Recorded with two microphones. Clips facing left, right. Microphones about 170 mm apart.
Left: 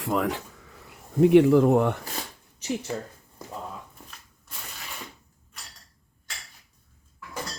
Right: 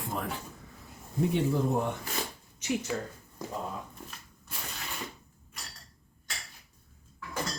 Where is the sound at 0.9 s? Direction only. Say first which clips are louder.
Left 13 dB; 70° left (ahead or behind).